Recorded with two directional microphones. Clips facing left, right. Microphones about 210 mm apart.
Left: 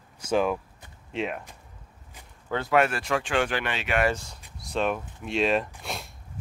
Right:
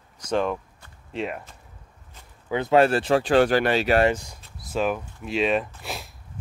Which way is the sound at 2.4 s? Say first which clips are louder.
Right 4 dB; 15° right (ahead or behind).